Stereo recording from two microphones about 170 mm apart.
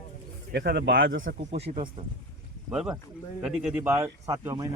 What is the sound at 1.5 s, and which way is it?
Speech, 35° right (ahead or behind).